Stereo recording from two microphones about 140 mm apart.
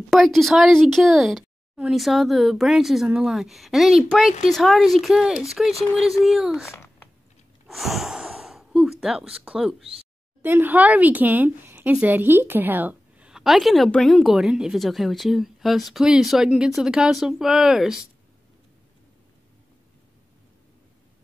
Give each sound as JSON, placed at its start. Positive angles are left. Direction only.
{"t": 0.1, "sound": "speech", "side_deg": 0}
{"t": 6.6, "sound": "a child's voice", "side_deg": 20}
{"t": 7.6, "sound": "gasp", "side_deg": 0}
{"t": 10.4, "sound": "speech", "side_deg": -15}